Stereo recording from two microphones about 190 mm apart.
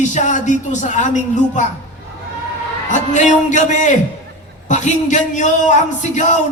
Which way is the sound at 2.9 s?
40° left (ahead or behind).